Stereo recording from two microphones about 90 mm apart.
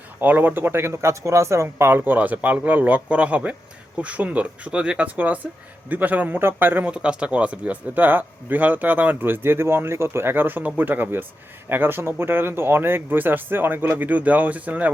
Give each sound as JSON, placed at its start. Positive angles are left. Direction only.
{"t": 0.2, "sound": "a man's voice", "side_deg": -20}